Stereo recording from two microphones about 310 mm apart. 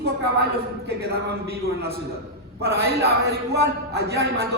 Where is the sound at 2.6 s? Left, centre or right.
Right.